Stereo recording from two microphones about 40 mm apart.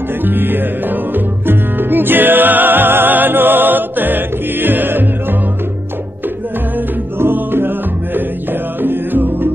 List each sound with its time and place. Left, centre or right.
0.2 s music: right
7.3 s music: right